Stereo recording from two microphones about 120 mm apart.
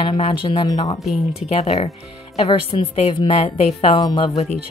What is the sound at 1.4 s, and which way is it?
A woman's voice, 55° left (ahead or behind).